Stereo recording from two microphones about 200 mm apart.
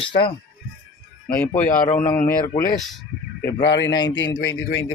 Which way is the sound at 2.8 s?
Centre (ahead or behind).